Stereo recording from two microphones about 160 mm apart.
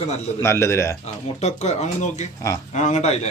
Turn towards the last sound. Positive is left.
turn(degrees=45)  # may be behind; listen again after turning